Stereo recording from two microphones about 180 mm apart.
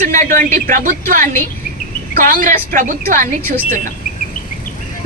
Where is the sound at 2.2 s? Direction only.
50° right (ahead or behind).